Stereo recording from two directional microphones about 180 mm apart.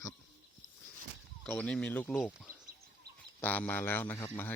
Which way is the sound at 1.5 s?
5° left (ahead or behind).